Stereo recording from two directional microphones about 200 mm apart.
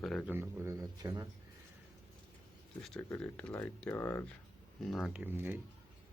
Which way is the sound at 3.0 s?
10° left (ahead or behind).